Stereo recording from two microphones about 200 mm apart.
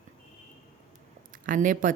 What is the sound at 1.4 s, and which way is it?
Speech, 40° right (ahead or behind).